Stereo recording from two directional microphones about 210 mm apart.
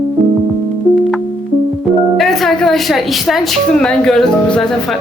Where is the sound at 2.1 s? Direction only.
Centre (ahead or behind).